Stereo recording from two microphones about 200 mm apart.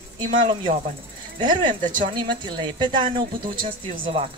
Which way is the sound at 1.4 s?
25° right (ahead or behind).